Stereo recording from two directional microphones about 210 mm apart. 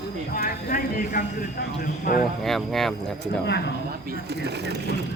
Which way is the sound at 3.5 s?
55° left (ahead or behind).